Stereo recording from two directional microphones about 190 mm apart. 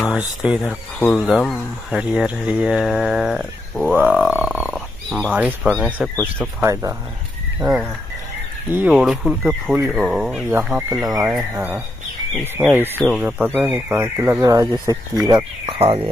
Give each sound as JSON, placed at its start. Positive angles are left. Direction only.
{"t": 0.0, "sound": "speech", "side_deg": -5}
{"t": 6.6, "sound": "speech", "side_deg": -15}
{"t": 11.5, "sound": "speech", "side_deg": -10}